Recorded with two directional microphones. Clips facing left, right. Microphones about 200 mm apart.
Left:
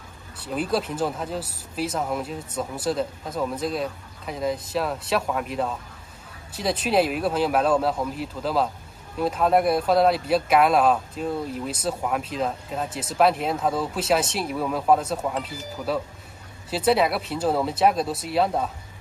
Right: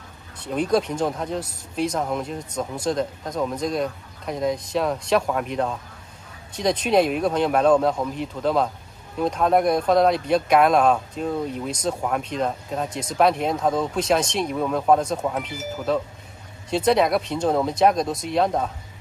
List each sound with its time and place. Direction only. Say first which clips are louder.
0.5 s speech: right 4 dB; 5° left (ahead or behind)